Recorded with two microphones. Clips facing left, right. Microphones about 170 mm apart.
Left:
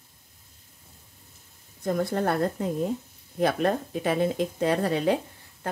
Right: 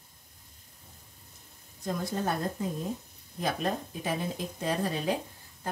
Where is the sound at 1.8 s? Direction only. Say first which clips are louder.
Left 6 dB; 60° left (ahead or behind).